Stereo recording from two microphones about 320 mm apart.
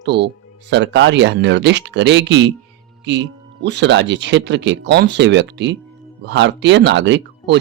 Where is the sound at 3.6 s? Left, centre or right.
Right.